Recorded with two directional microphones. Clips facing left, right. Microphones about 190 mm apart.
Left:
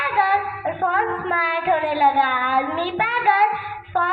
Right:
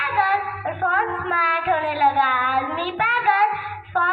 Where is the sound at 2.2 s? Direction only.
30° left (ahead or behind).